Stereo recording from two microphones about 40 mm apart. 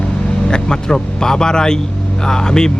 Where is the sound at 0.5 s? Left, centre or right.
Centre.